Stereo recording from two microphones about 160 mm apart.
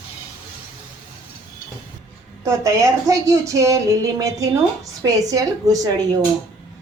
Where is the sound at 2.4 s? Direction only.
20° right (ahead or behind).